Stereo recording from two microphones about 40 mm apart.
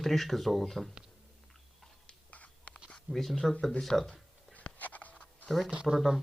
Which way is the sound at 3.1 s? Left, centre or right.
Centre.